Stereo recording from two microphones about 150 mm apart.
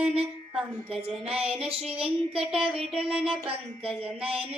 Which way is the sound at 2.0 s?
40° right (ahead or behind).